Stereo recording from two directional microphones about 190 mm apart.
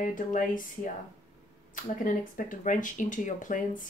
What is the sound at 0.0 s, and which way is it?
Speech, 45° left (ahead or behind).